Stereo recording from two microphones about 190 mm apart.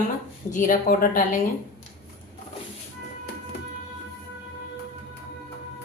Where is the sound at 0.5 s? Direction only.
45° left (ahead or behind).